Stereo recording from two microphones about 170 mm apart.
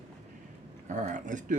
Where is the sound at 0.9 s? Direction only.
45° right (ahead or behind).